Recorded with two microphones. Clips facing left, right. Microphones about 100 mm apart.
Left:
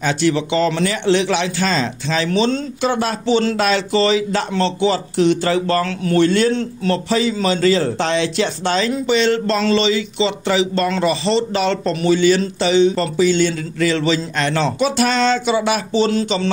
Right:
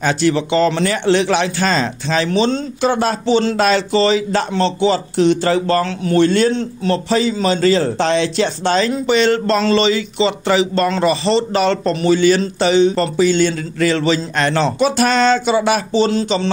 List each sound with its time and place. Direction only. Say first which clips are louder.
0.0 s speech: right 2 dB; 45° right (ahead or behind)
6.5 s a man's voice: right 1 dB; 20° right (ahead or behind)
7.1 s speech: right 2 dB; 35° right (ahead or behind)